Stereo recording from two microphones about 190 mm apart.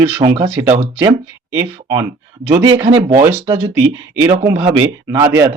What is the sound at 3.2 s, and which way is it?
A man's voice, 10° right (ahead or behind).